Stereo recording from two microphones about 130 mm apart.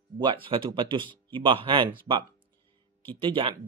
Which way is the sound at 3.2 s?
40° right (ahead or behind).